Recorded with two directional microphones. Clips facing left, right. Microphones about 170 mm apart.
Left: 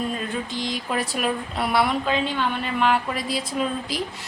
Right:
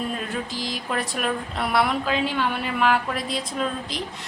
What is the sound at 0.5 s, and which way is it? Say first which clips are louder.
A woman's voice: left 1 dB; centre (ahead or behind).